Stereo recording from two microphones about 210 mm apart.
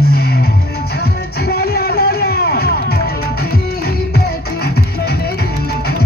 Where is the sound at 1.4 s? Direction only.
50° left (ahead or behind).